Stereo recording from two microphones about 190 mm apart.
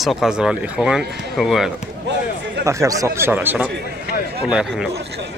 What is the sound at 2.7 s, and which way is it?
Speech, 15° right (ahead or behind).